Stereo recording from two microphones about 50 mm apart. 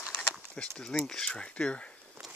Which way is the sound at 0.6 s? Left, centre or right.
Centre.